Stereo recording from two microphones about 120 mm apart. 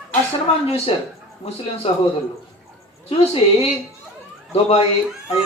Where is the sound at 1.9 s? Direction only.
50° left (ahead or behind).